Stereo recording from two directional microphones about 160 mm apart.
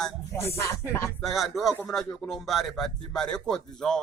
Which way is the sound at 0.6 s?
20° left (ahead or behind).